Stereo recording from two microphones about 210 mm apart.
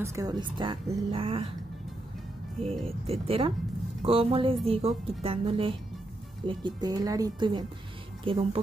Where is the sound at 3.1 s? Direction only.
25° right (ahead or behind).